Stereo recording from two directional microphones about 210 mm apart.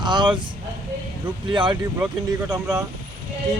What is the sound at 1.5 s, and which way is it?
Speech, 25° right (ahead or behind).